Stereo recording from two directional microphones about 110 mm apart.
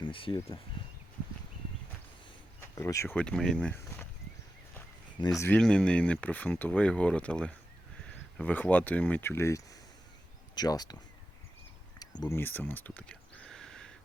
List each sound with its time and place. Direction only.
0.0 s speech: 50° left (ahead or behind)
2.6 s speech: 25° left (ahead or behind)
3.2 s speech: 5° left (ahead or behind)
3.8 s speech: 25° left (ahead or behind)
5.5 s speech: 10° left (ahead or behind); by 11.0 s 35° left (ahead or behind)
11.9 s a sound: 40° left (ahead or behind)
12.3 s a sound: 20° left (ahead or behind)